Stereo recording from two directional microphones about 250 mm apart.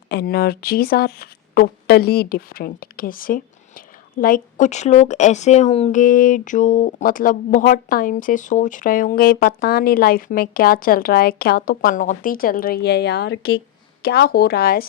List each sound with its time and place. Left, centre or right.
0.1 s speech: left